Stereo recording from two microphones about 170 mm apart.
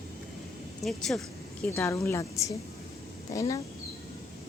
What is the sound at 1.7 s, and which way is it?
Speech, 15° left (ahead or behind).